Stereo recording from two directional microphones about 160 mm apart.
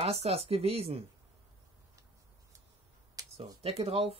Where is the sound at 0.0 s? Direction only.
40° right (ahead or behind).